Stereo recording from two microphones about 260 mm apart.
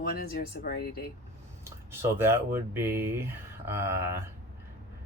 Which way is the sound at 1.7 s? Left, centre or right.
Centre.